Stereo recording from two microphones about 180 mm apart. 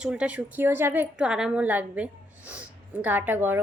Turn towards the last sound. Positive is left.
turn(degrees=-10)  # may be behind; listen again after turning